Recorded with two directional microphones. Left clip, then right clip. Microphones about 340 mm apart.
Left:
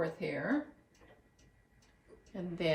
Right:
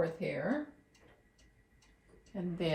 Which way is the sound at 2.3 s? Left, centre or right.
Centre.